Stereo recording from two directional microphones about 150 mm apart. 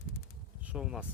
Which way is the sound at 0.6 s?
5° right (ahead or behind).